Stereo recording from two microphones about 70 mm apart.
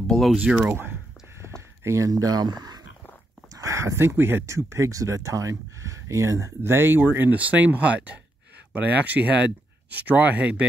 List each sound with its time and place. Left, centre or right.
0.0 s speech: centre
0.4 s speech: centre
0.7 s speech: right
1.4 s a sound: right
3.5 s speech: right; by 10.6 s centre